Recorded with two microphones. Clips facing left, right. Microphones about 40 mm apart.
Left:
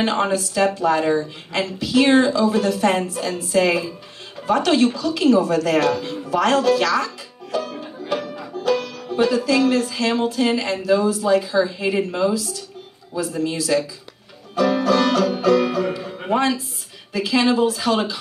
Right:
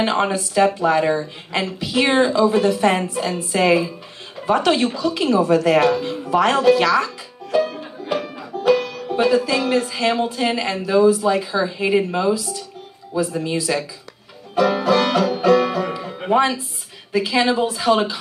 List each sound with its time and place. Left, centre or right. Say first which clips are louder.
0.0 s a woman's voice: right 1 dB; right
7.5 s banjo: right 6 dB; right
9.1 s a woman's voice: right 1 dB; right